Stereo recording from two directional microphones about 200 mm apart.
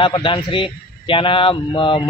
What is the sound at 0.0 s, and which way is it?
A man's voice, 25° left (ahead or behind).